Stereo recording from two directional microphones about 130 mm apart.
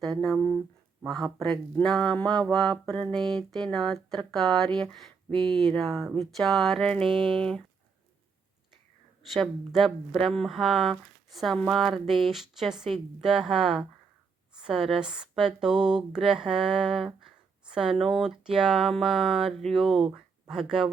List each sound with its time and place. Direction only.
0.2 s speech: centre (ahead or behind)
1.8 s a sound: 5° left (ahead or behind)
2.4 s speech: 5° left (ahead or behind)
5.3 s speech: 35° right (ahead or behind)
5.5 s speech: centre (ahead or behind)
9.3 s speech: centre (ahead or behind)